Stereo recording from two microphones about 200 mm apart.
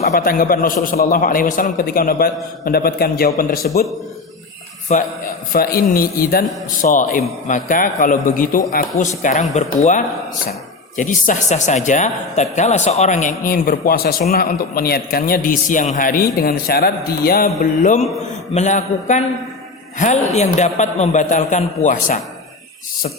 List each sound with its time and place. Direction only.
0.0 s speech: 45° left (ahead or behind)
4.9 s a man's voice: 35° left (ahead or behind)
17.8 s a man's voice: 35° left (ahead or behind)